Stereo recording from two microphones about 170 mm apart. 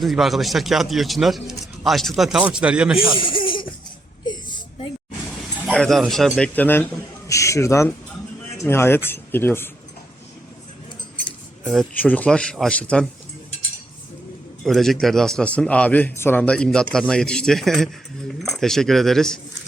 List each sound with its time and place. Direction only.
0.0 s a man's voice: centre (ahead or behind)
3.2 s music: 30° left (ahead or behind)
4.3 s a sound: 25° left (ahead or behind)
5.7 s a man's voice: centre (ahead or behind)
11.6 s a man's voice: centre (ahead or behind)
14.6 s a man's voice: centre (ahead or behind)